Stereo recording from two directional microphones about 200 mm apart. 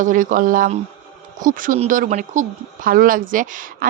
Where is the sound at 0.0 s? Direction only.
40° right (ahead or behind).